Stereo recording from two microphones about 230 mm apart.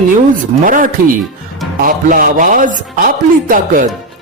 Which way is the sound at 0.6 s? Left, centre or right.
Right.